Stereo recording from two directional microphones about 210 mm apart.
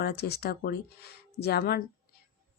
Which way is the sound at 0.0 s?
50° left (ahead or behind).